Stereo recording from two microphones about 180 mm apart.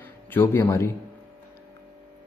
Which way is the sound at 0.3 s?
15° left (ahead or behind).